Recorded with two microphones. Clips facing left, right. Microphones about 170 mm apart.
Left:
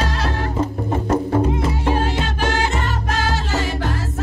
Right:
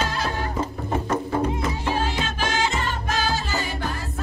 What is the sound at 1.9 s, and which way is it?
Music, 60° left (ahead or behind).